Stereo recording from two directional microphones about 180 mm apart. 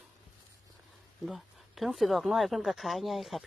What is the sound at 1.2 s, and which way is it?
Speech, centre (ahead or behind).